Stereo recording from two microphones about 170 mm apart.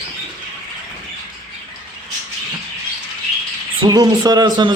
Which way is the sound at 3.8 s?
25° right (ahead or behind).